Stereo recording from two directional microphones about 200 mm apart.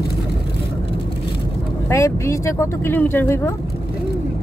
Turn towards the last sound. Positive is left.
turn(degrees=10)  # may be behind; listen again after turning